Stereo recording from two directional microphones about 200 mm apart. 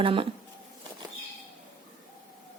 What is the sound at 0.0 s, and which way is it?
Speech, 25° right (ahead or behind).